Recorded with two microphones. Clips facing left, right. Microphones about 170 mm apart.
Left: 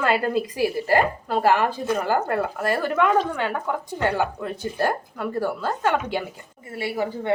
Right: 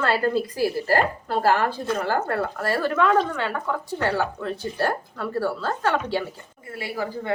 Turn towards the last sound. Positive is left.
turn(degrees=25)  # may be behind; listen again after turning